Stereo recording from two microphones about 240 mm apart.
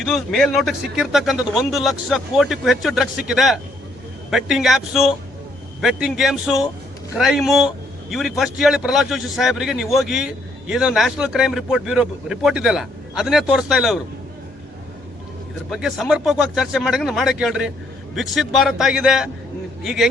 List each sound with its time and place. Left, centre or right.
0.0 s a man's voice: centre
15.7 s a man's voice: centre